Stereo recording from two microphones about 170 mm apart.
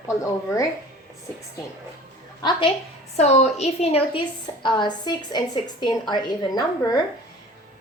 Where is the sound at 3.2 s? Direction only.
40° left (ahead or behind).